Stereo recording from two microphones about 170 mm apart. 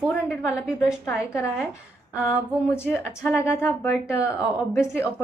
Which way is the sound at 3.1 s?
15° left (ahead or behind).